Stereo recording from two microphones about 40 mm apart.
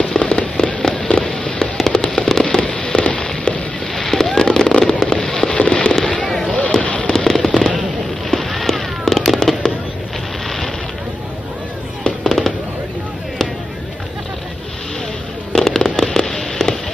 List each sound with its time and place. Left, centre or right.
0.2 s fireworks: left
1.2 s fireworks: centre
2.4 s fireworks: left
3.9 s fireworks: centre
5.6 s fireworks: left
5.9 s a sound: centre
6.8 s fireworks: left
7.1 s fireworks: centre
12.0 s fireworks: centre
15.5 s fireworks: centre